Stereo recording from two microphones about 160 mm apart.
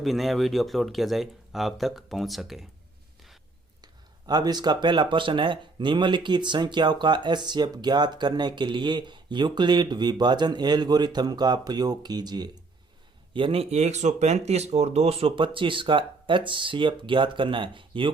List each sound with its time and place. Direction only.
0.0 s speech: centre (ahead or behind)
4.3 s speech: 25° right (ahead or behind)